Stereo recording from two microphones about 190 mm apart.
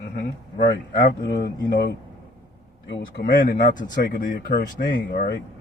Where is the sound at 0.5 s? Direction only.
50° left (ahead or behind).